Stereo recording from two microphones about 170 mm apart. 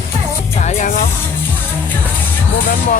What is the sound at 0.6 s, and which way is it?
Music, 50° left (ahead or behind).